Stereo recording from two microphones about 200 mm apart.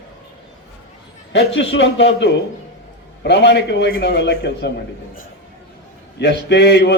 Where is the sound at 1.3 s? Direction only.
65° left (ahead or behind).